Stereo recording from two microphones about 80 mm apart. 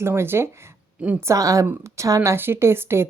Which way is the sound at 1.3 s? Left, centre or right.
Right.